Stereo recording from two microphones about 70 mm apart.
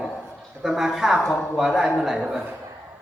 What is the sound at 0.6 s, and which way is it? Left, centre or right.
A man's voice, centre.